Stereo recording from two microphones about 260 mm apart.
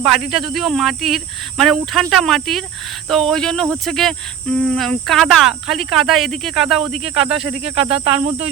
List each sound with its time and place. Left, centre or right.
0.5 s speech: centre
7.6 s speech: right